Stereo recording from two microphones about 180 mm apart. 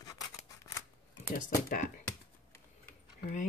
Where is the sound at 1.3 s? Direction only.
45° left (ahead or behind).